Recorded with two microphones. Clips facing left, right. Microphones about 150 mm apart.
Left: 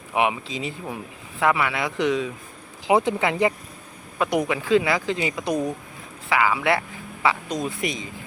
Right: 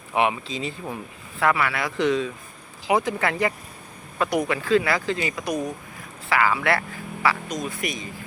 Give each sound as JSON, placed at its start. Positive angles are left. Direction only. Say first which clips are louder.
{"t": 0.1, "sound": "speech", "louder": "even", "side_deg": 15}
{"t": 2.8, "sound": "speech", "louder": "left 2 dB", "side_deg": 25}
{"t": 6.2, "sound": "speech", "louder": "left 1 dB", "side_deg": 15}